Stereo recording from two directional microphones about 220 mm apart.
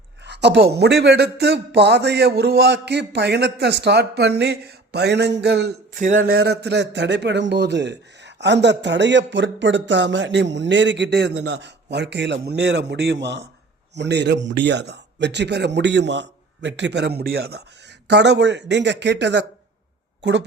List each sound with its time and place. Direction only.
0.3 s speech: 50° right (ahead or behind)
5.9 s speech: 35° right (ahead or behind); by 20.4 s 55° right (ahead or behind)